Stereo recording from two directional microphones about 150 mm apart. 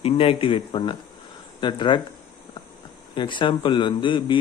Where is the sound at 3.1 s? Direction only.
30° left (ahead or behind).